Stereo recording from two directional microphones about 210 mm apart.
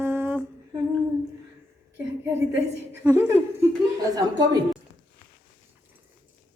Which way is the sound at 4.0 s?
15° right (ahead or behind).